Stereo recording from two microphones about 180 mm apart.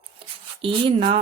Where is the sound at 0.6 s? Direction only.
25° right (ahead or behind).